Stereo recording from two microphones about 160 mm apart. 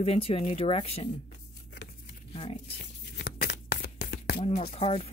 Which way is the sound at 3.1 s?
75° left (ahead or behind).